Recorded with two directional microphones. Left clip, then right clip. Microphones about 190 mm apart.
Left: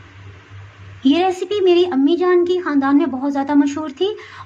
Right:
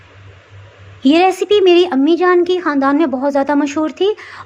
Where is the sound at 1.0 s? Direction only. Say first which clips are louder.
Right 5 dB; 20° right (ahead or behind).